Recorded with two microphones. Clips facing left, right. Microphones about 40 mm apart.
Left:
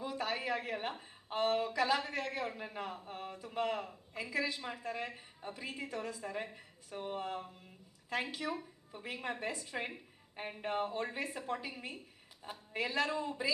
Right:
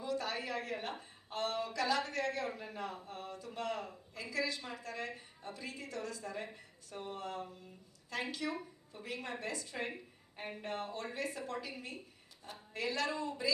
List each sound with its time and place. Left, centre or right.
0.0 s a woman's voice: centre